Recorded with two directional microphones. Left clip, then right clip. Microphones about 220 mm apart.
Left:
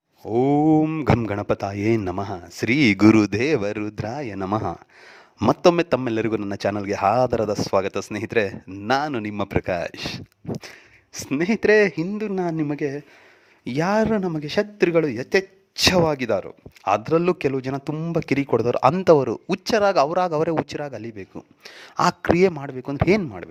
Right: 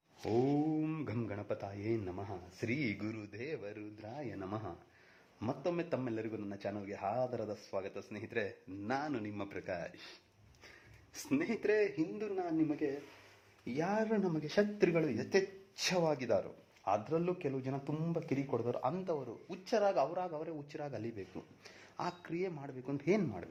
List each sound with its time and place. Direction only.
0.3 s a man's voice: 40° left (ahead or behind)
11.3 s a man's voice: 40° left (ahead or behind)